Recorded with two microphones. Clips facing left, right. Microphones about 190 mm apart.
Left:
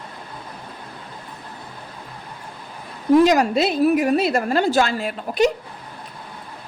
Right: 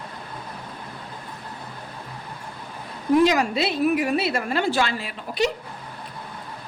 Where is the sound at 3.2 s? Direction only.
45° left (ahead or behind).